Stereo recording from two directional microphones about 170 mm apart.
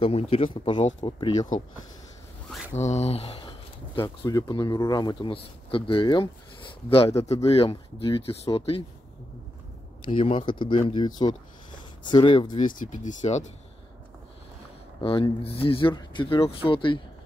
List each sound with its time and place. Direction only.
0.0 s speech: 35° left (ahead or behind)
2.7 s speech: 40° left (ahead or behind)
4.2 s speech: 25° left (ahead or behind)
10.0 s speech: 30° left (ahead or behind)
12.5 s speech: 50° left (ahead or behind)
15.0 s speech: 30° left (ahead or behind)